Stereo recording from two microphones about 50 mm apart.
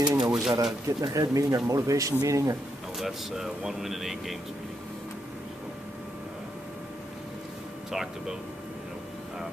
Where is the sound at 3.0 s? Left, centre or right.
Centre.